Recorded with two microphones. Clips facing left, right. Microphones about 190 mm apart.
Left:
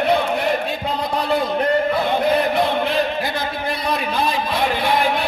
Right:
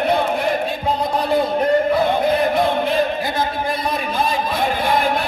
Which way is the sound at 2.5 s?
50° right (ahead or behind).